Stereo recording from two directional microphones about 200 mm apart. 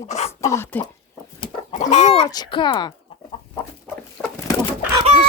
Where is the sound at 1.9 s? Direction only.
35° left (ahead or behind).